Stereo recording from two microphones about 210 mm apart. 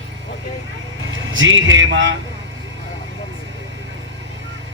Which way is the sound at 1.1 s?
65° right (ahead or behind).